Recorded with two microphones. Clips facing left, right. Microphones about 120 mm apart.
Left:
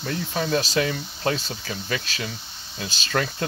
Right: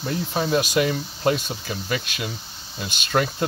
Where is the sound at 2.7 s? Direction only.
20° right (ahead or behind).